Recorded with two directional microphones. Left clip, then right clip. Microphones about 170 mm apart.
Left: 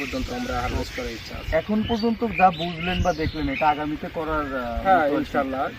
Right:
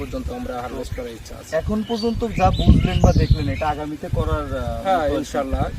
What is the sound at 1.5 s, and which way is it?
Speech, 20° right (ahead or behind).